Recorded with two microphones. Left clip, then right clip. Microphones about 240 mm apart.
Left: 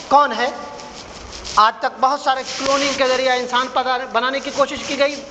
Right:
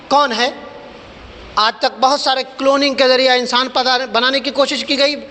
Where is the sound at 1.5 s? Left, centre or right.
Right.